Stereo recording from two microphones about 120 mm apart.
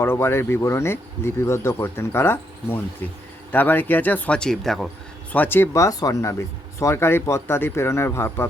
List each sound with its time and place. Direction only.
0.0 s speech: 20° left (ahead or behind); by 4.9 s centre (ahead or behind)
5.3 s speech: 15° left (ahead or behind)